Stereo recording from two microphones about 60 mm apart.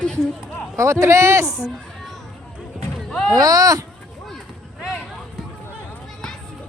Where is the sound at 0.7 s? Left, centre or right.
Right.